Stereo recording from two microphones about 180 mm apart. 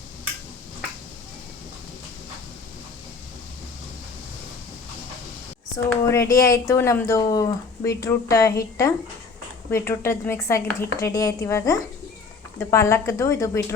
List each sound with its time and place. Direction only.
5.7 s a woman's voice: 15° left (ahead or behind)